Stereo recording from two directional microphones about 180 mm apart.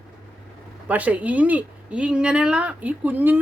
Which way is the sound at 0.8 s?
10° right (ahead or behind).